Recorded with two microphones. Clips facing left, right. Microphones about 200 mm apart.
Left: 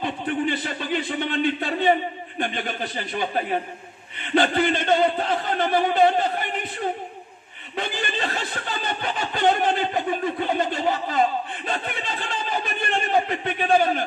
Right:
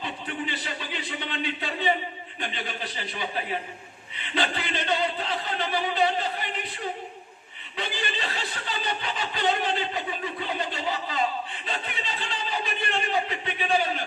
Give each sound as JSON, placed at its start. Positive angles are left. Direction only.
{"t": 0.0, "sound": "a man's voice", "side_deg": 50}